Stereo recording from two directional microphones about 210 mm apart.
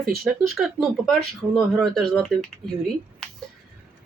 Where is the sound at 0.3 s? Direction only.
Centre (ahead or behind).